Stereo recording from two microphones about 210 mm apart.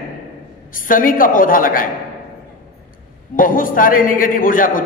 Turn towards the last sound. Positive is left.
turn(degrees=40)  # may be behind; listen again after turning